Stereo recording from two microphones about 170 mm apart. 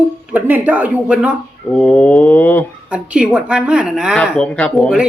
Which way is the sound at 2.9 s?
5° right (ahead or behind).